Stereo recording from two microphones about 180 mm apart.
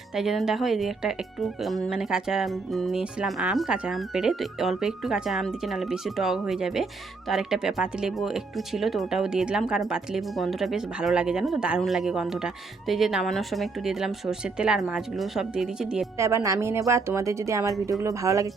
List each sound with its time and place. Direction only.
0.1 s speech: centre (ahead or behind)
16.1 s speech: 15° right (ahead or behind)